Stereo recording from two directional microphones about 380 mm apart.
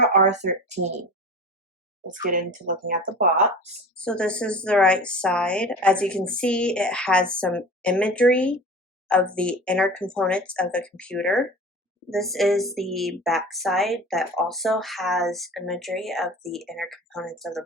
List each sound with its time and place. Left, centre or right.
0.0 s speech: centre
2.1 s speech: right
3.9 s a woman's voice: centre